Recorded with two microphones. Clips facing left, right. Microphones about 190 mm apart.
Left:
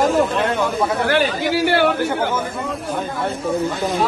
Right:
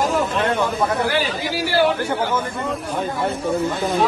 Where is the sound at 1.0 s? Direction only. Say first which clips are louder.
Left 4 dB; 55° left (ahead or behind).